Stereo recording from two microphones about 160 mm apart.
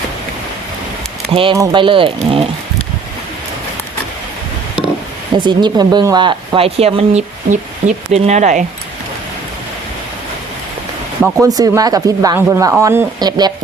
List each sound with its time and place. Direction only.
1.3 s speech: 35° right (ahead or behind)
5.4 s speech: 30° right (ahead or behind); by 8.6 s 50° right (ahead or behind)
11.3 s speech: 20° right (ahead or behind)
13.1 s speech: 25° right (ahead or behind)